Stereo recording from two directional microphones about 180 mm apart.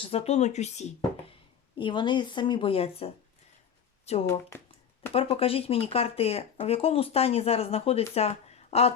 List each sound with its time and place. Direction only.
0.0 s speech: 35° left (ahead or behind)
1.8 s a woman's voice: 25° left (ahead or behind)
4.3 s speech: 15° left (ahead or behind)
5.1 s speech: 35° left (ahead or behind)